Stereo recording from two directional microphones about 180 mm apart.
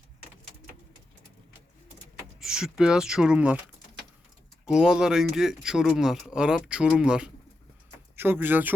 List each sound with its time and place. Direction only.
2.4 s speech: centre (ahead or behind)
4.6 s speech: 5° right (ahead or behind)